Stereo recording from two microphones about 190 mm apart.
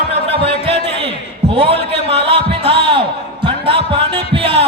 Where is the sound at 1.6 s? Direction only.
30° right (ahead or behind).